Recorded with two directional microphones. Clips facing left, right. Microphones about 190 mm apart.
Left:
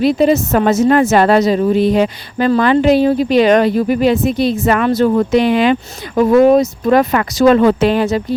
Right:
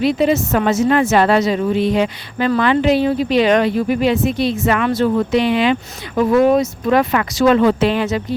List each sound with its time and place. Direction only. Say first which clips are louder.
0.0 s speech: left 3 dB; 40° left (ahead or behind)